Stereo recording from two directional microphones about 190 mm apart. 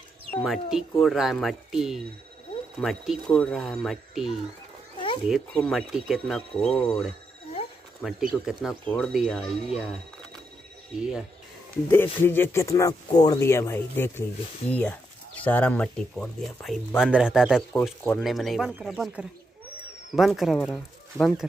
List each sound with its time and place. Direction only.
0.3 s speech: centre (ahead or behind)
4.9 s a sound: 25° left (ahead or behind)
5.3 s speech: 5° left (ahead or behind)
11.0 s speech: 5° right (ahead or behind)
11.9 s speech: 10° left (ahead or behind)